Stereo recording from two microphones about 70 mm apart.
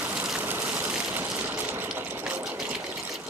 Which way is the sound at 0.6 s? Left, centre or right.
Centre.